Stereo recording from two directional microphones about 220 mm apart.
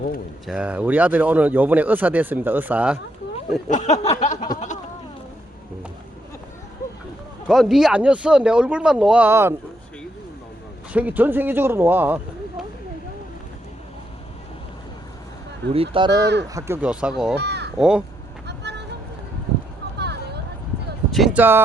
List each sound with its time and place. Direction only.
0.4 s speech: 5° right (ahead or behind)
3.7 s a sound: 30° left (ahead or behind)
7.4 s speech: centre (ahead or behind)
10.9 s speech: 5° right (ahead or behind)
15.7 s speech: 25° right (ahead or behind)
16.2 s speech: 50° right (ahead or behind)
16.6 s speech: 10° right (ahead or behind)
17.3 s speech: 50° right (ahead or behind)
17.7 s speech: 5° right (ahead or behind)
18.4 s vehicle: 50° right (ahead or behind)
20.0 s a sound: 50° right (ahead or behind)
21.1 s a sound: centre (ahead or behind)